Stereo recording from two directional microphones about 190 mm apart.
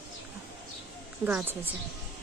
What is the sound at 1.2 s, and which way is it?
Speech, 10° right (ahead or behind).